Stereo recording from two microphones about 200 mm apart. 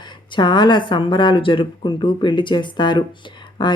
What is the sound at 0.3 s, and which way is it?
Speech, 20° left (ahead or behind).